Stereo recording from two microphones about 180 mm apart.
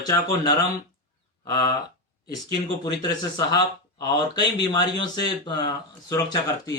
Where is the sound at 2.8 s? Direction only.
20° left (ahead or behind).